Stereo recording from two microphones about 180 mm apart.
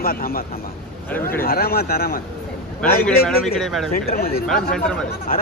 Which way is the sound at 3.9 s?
60° left (ahead or behind).